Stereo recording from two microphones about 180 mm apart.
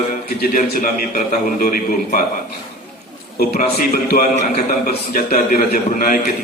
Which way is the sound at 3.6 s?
55° left (ahead or behind).